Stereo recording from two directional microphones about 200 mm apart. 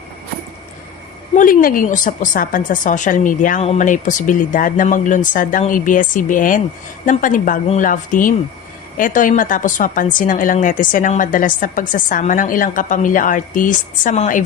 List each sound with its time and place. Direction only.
1.4 s a woman's voice: 45° left (ahead or behind)